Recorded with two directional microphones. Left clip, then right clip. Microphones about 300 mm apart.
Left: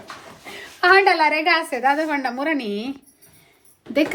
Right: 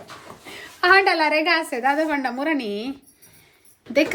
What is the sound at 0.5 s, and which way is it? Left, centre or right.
A child's voice, centre.